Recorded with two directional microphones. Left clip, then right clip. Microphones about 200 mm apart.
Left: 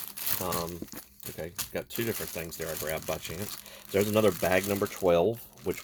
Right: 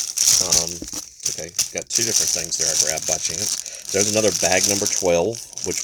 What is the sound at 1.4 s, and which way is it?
Speech, 10° left (ahead or behind).